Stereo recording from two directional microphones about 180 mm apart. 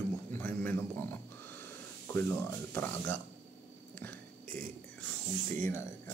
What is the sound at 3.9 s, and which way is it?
Whispering, 10° left (ahead or behind).